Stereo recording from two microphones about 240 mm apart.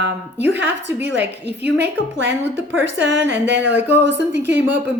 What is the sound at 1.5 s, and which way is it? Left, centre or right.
Speech, right.